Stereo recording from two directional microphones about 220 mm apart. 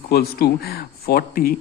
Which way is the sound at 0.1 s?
45° left (ahead or behind).